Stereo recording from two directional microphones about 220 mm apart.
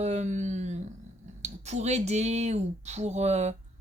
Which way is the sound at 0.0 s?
30° right (ahead or behind).